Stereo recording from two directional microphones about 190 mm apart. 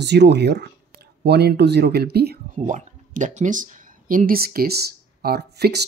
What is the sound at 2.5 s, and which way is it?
Speech, 40° right (ahead or behind).